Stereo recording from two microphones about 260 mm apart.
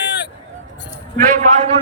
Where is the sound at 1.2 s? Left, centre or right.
Right.